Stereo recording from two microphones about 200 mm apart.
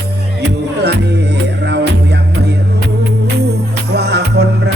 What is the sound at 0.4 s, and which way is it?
Music, 55° right (ahead or behind).